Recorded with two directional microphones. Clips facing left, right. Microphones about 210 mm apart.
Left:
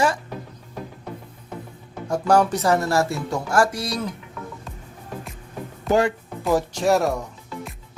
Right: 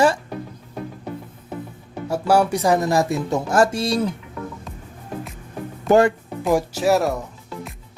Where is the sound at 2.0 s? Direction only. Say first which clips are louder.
Even; 5° right (ahead or behind); by 4.0 s 25° right (ahead or behind).